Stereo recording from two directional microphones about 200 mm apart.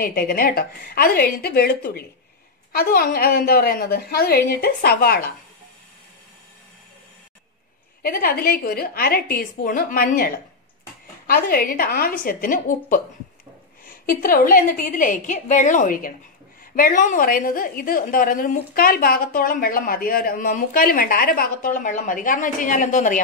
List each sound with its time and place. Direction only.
0.0 s a woman's voice: 50° left (ahead or behind)
8.0 s a woman's voice: 45° left (ahead or behind)